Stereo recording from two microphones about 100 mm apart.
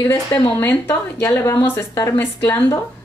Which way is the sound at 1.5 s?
20° left (ahead or behind).